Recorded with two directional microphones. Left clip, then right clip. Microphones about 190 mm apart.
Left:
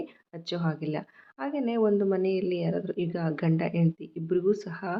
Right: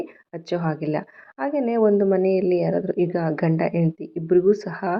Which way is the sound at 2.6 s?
20° right (ahead or behind).